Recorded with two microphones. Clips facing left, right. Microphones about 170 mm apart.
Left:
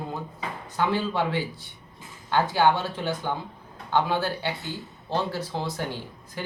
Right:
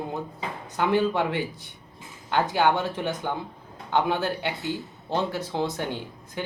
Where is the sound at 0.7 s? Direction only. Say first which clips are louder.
Right 3 dB; 15° right (ahead or behind).